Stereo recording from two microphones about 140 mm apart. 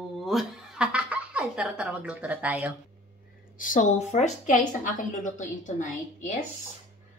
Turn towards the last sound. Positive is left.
turn(degrees=65)  # may be behind; listen again after turning